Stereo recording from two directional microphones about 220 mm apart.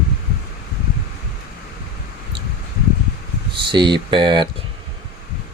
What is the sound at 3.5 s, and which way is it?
Speech, 20° right (ahead or behind).